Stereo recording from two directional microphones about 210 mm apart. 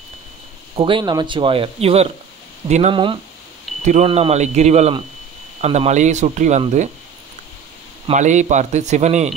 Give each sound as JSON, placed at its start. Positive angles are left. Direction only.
{"t": 0.7, "sound": "speech", "side_deg": -25}
{"t": 8.1, "sound": "speech", "side_deg": -35}